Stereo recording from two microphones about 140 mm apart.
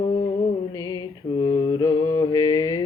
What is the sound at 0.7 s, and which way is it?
Mantra, 30° left (ahead or behind).